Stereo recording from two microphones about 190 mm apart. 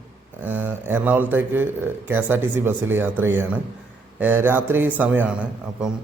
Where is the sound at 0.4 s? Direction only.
10° right (ahead or behind).